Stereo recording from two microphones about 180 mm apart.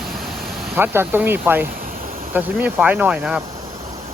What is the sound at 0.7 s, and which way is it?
Speech, 10° right (ahead or behind).